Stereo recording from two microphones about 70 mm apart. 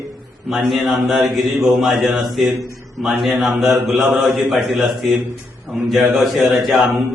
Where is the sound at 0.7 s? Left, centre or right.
Centre.